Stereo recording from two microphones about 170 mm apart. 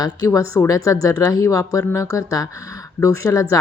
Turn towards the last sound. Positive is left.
turn(degrees=20)  # may be behind; listen again after turning